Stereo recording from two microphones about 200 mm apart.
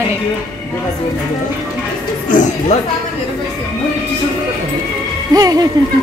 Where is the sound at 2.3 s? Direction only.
40° left (ahead or behind).